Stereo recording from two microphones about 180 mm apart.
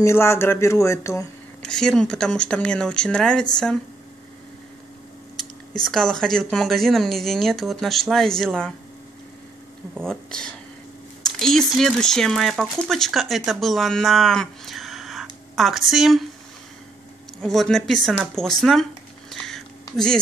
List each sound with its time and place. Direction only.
0.0 s speech: 15° left (ahead or behind)
1.6 s speech: 5° left (ahead or behind)
5.9 s speech: 5° left (ahead or behind)
10.0 s speech: 5° left (ahead or behind)
17.4 s speech: centre (ahead or behind)
19.3 s a sound: 5° left (ahead or behind)